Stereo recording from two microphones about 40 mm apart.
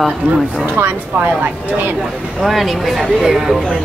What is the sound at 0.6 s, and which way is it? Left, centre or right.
Speech, right.